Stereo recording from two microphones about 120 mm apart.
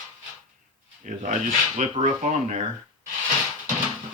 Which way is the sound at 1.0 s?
90° right.